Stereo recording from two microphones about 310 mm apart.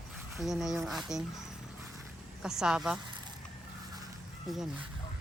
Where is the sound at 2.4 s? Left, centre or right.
Centre.